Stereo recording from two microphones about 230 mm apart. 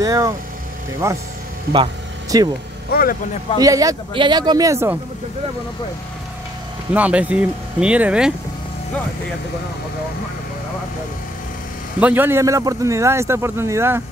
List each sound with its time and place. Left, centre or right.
0.0 s a man's voice: centre
2.3 s a man's voice: centre
2.9 s speech: left
3.5 s a man's voice: centre
6.9 s speech: centre
12.0 s a man's voice: centre